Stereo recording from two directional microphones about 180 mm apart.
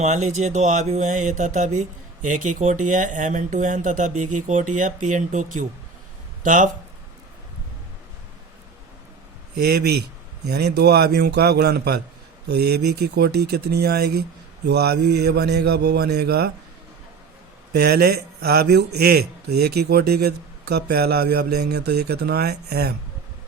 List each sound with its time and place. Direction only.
0.0 s speech: 40° right (ahead or behind)
9.6 s a man's voice: 65° right (ahead or behind)
17.7 s a man's voice: 65° right (ahead or behind)